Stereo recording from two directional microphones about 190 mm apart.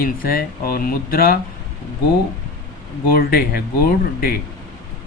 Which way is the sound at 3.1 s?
50° left (ahead or behind).